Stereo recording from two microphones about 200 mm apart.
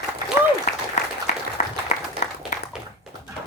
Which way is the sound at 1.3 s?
35° left (ahead or behind).